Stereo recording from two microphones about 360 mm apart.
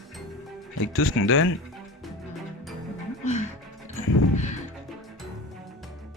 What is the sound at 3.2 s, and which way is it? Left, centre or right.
Music, centre.